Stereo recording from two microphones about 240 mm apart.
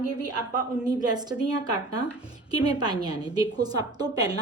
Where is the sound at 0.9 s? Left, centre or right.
Centre.